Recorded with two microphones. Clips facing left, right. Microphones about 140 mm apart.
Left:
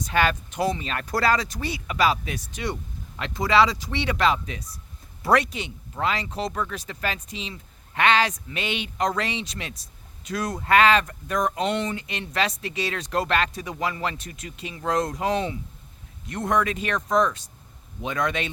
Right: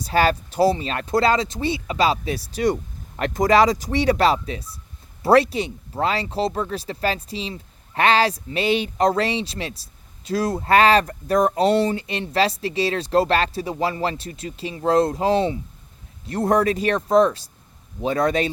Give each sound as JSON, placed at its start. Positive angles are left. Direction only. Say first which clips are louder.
{"t": 0.0, "sound": "speech", "louder": "right 4 dB", "side_deg": -35}
{"t": 3.2, "sound": "speech", "louder": "right 4 dB", "side_deg": -45}